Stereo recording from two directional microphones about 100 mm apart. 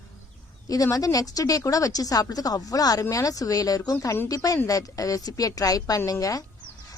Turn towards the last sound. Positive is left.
turn(degrees=35)  # may be behind; listen again after turning